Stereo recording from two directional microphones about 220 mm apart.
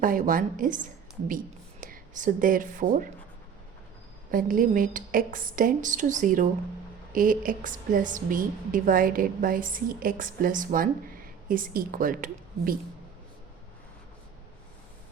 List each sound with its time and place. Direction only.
0.0 s a woman's voice: 40° right (ahead or behind)
1.8 s speech: 35° right (ahead or behind)
4.3 s a woman's voice: 40° right (ahead or behind)